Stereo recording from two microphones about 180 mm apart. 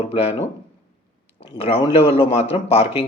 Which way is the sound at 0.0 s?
35° left (ahead or behind).